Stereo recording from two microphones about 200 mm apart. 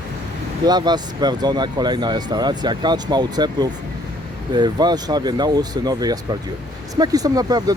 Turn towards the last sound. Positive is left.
turn(degrees=-20)  # may be behind; listen again after turning